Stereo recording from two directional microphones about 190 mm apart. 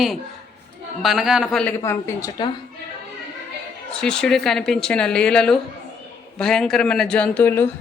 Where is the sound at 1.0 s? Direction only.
Centre (ahead or behind).